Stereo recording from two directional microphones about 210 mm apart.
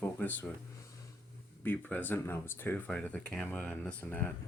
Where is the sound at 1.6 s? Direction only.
10° left (ahead or behind).